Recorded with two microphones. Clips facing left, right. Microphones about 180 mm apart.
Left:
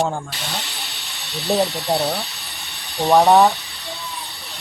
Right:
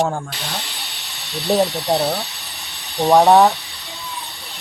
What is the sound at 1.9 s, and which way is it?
Speech, 5° right (ahead or behind).